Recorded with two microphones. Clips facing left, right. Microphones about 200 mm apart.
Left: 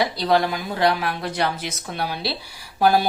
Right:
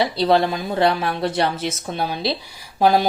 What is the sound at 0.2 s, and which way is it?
Speech, 25° right (ahead or behind).